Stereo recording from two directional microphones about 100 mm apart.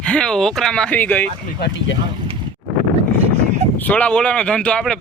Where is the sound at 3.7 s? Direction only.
15° left (ahead or behind).